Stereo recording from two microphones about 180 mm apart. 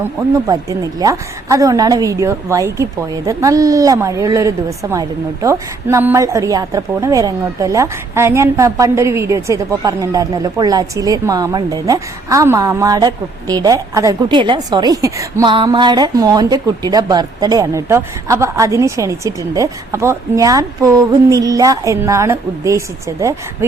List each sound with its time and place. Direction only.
0.4 s a woman's voice: 20° right (ahead or behind)